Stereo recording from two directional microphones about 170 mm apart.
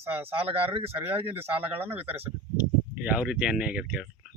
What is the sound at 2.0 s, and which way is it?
Speech, 35° right (ahead or behind).